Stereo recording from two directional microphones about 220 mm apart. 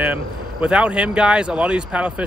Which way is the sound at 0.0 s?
5° right (ahead or behind).